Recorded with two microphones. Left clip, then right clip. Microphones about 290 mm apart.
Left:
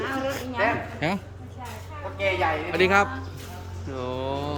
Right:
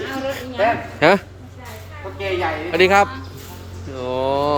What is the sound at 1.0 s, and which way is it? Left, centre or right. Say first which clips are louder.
Speech: right 15 dB; centre.